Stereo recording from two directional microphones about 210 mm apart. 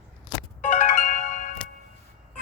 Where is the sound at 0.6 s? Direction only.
35° left (ahead or behind).